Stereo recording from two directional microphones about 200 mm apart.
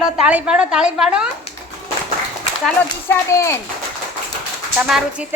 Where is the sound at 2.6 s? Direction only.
10° left (ahead or behind).